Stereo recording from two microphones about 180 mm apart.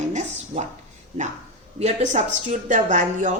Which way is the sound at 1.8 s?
40° right (ahead or behind).